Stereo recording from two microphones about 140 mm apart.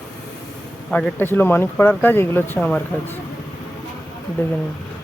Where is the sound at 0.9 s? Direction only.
5° left (ahead or behind).